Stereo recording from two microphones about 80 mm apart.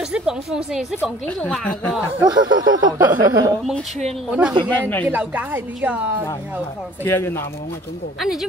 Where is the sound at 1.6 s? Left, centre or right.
Centre.